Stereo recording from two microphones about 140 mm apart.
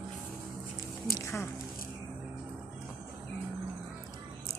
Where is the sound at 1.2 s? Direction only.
20° left (ahead or behind).